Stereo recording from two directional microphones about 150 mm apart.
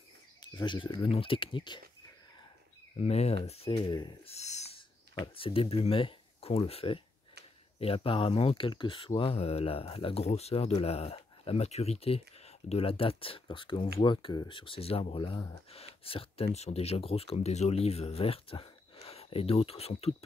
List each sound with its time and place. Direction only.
0.4 s speech: 30° left (ahead or behind)
3.0 s speech: 45° left (ahead or behind)
4.4 s owl: 45° left (ahead or behind)
5.2 s speech: 35° left (ahead or behind)
15.7 s speech: 40° left (ahead or behind)